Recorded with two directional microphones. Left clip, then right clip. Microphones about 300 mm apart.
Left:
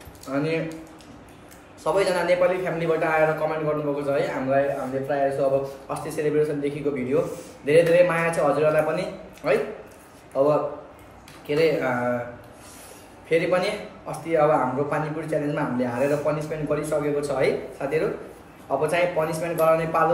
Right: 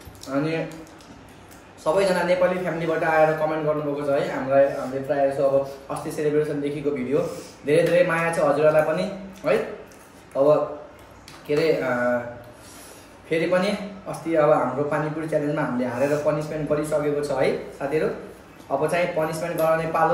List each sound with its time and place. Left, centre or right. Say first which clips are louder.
0.3 s a man's voice: even; centre
1.8 s a man's voice: right 1 dB; centre
13.3 s a man's voice: even; centre